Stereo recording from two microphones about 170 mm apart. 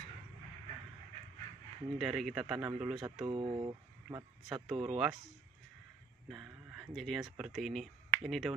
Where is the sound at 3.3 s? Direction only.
30° right (ahead or behind).